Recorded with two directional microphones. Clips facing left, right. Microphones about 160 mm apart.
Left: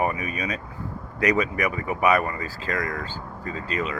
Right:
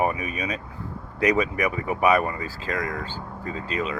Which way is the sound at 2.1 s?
5° right (ahead or behind).